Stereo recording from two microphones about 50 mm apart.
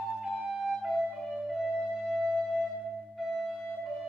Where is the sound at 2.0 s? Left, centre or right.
Centre.